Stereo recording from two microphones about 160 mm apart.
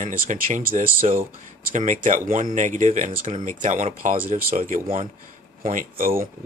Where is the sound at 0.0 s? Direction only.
55° right (ahead or behind).